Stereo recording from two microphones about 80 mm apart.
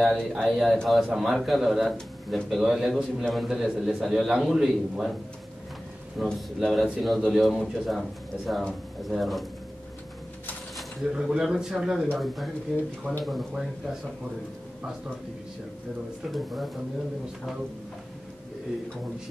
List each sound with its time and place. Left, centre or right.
0.0 s a man's voice: centre
6.2 s a man's voice: centre
10.8 s a man's voice: centre
16.3 s a man's voice: centre